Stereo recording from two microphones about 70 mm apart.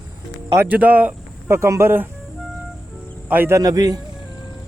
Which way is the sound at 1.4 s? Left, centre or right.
Right.